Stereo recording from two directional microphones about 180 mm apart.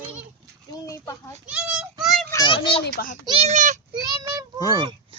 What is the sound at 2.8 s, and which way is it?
Speech, 50° left (ahead or behind).